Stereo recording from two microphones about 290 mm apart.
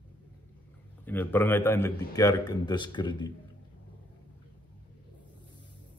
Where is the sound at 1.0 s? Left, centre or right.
Centre.